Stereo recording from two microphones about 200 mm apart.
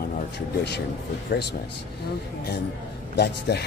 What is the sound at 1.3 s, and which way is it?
Speech, 50° left (ahead or behind).